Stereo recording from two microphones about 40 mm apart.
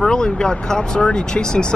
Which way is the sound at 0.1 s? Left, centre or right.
Centre.